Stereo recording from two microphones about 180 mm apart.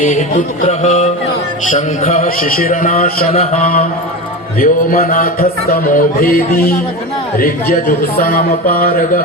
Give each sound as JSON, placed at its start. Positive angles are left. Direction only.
{"t": 0.0, "sound": "music", "side_deg": 50}
{"t": 1.7, "sound": "speech", "side_deg": 40}
{"t": 2.2, "sound": "music", "side_deg": 50}
{"t": 3.3, "sound": "music", "side_deg": 45}
{"t": 7.3, "sound": "a sound", "side_deg": 55}